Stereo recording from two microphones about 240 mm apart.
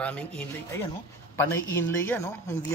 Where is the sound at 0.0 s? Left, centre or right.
Centre.